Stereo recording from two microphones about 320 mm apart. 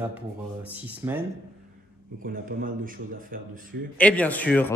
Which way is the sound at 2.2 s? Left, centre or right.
Right.